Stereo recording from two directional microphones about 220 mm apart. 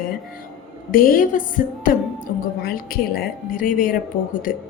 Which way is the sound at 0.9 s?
40° left (ahead or behind).